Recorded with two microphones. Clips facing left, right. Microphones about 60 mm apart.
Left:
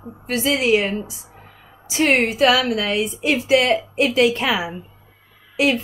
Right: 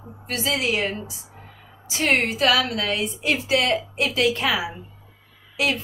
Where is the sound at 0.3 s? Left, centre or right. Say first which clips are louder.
Left 6 dB; left.